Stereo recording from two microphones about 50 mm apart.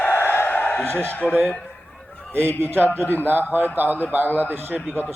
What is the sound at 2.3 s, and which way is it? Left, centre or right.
A man's voice, right.